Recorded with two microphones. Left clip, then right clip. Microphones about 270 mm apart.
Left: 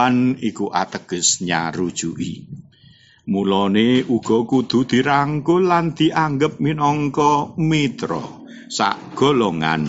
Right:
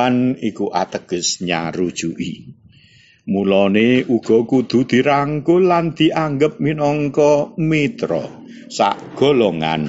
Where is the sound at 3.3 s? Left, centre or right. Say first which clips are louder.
Right 3 dB; centre.